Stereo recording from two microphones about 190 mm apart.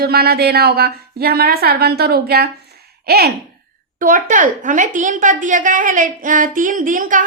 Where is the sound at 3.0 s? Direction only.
55° right (ahead or behind).